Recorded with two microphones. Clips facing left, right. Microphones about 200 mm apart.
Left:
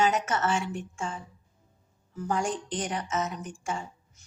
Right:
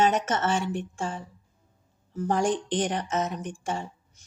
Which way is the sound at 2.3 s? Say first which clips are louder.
Right 5 dB; 35° right (ahead or behind).